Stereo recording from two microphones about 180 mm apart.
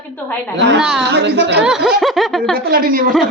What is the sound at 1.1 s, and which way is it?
Speech, 70° right (ahead or behind).